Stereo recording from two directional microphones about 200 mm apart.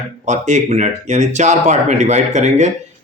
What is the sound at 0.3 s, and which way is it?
Speech, 35° right (ahead or behind).